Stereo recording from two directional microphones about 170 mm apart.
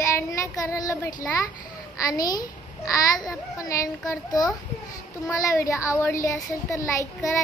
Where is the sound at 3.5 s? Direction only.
20° left (ahead or behind).